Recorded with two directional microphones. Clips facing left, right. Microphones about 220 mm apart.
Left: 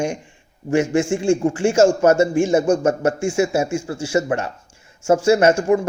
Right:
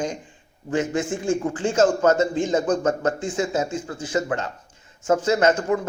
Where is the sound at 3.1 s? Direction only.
10° left (ahead or behind).